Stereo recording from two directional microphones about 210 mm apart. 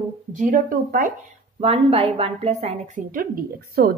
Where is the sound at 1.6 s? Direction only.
30° right (ahead or behind).